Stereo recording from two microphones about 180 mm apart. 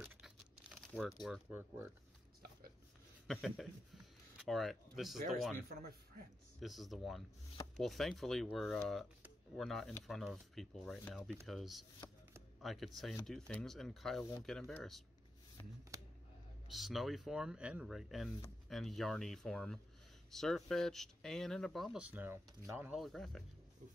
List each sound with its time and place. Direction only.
0.1 s crumpling: 10° right (ahead or behind)
1.2 s speech: centre (ahead or behind)
3.3 s speech: centre (ahead or behind)
5.6 s a man's voice: 55° right (ahead or behind)
6.6 s speech: centre (ahead or behind)
16.6 s speech: centre (ahead or behind)